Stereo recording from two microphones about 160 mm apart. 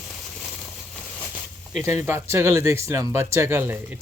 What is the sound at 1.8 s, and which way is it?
Speech, 15° right (ahead or behind).